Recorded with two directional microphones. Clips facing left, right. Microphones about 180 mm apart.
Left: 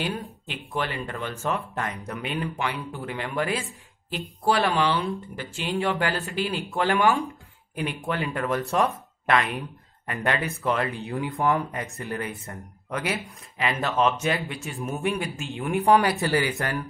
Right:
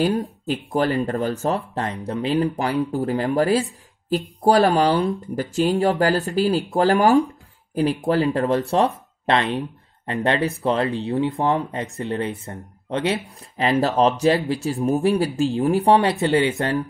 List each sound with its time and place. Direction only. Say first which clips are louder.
0.0 s speech: right 10 dB; 40° right (ahead or behind)